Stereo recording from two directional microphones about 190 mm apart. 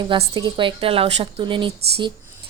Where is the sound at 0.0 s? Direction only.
25° right (ahead or behind).